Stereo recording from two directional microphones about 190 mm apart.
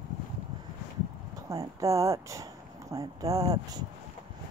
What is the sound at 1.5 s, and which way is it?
Speech, 15° right (ahead or behind).